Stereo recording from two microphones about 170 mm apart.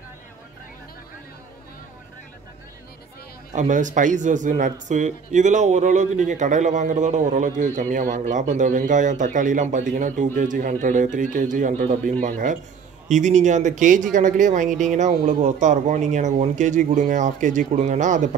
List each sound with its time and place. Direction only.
3.5 s speech: 45° right (ahead or behind)